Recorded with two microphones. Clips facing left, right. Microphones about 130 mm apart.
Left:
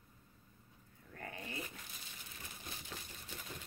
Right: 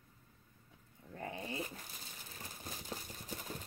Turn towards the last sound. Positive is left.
turn(degrees=-40)  # may be behind; listen again after turning